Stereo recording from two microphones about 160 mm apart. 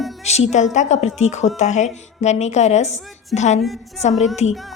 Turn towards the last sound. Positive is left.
turn(degrees=0)  # may be behind; listen again after turning